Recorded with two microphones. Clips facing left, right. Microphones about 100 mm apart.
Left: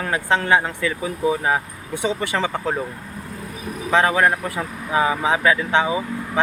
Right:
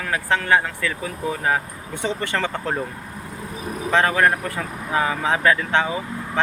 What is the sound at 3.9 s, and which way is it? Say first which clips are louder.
Speech: left 1 dB; 15° left (ahead or behind).